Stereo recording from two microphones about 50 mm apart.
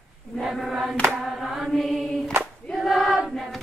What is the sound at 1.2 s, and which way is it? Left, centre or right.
Mantra, centre.